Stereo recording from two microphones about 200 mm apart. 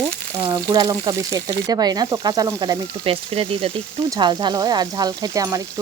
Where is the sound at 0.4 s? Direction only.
20° right (ahead or behind).